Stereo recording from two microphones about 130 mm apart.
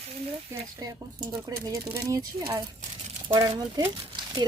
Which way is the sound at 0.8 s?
30° right (ahead or behind).